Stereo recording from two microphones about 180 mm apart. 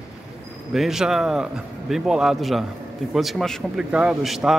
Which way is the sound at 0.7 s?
Centre (ahead or behind).